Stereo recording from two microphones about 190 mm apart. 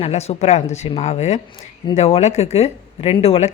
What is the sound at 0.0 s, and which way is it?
A woman's voice, 35° left (ahead or behind).